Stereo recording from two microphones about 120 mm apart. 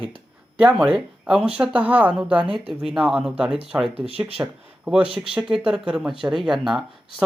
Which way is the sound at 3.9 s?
55° right (ahead or behind).